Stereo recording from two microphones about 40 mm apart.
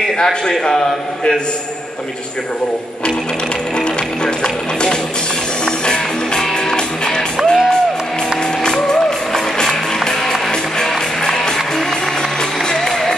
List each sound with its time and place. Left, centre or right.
0.2 s a man's voice: centre
4.2 s music: centre
7.3 s music: centre
8.6 s music: centre
10.8 s music: centre